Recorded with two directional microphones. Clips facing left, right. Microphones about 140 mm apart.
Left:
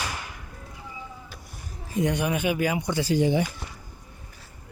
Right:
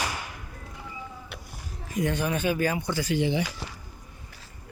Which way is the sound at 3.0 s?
40° left (ahead or behind).